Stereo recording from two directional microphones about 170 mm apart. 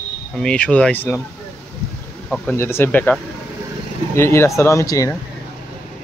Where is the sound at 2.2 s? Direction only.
5° left (ahead or behind).